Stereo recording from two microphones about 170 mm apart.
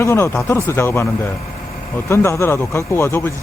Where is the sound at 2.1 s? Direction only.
15° left (ahead or behind).